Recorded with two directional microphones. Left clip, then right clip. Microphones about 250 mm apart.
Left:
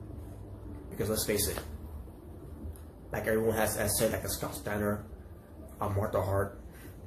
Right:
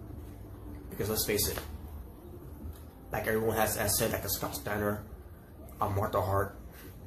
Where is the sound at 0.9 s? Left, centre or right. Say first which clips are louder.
Even; centre.